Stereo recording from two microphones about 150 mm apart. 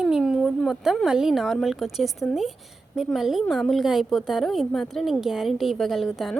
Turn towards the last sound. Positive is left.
turn(degrees=0)  # may be behind; listen again after turning